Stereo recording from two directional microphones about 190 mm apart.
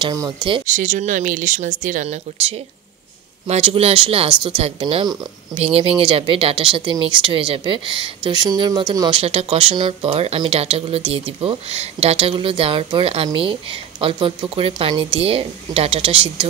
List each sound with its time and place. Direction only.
0.0 s speech: 20° right (ahead or behind)
0.7 s speech: 45° right (ahead or behind)